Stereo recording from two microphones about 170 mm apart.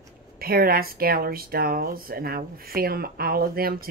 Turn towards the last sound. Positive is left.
turn(degrees=-60)  # may be behind; listen again after turning